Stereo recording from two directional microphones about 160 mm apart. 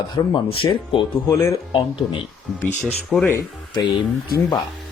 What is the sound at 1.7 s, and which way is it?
Speech, 30° left (ahead or behind).